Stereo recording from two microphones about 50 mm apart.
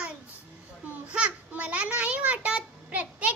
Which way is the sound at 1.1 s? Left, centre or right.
Right.